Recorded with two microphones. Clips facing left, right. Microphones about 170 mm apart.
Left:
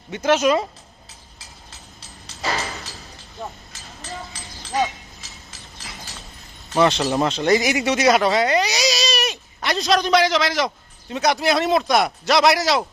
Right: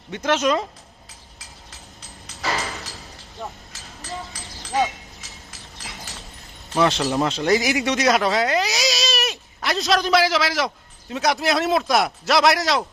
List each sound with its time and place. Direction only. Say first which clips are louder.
0.1 s speech: left 3 dB; 5° left (ahead or behind)
2.0 s a sound: left 2 dB; 30° left (ahead or behind)
6.7 s speech: left 2 dB; centre (ahead or behind)